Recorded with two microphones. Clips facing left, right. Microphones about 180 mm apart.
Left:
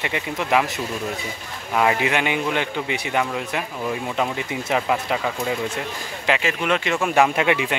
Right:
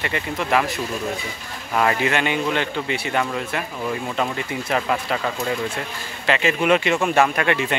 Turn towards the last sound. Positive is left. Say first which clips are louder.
# left 1 dB
turn(degrees=15)  # may be behind; listen again after turning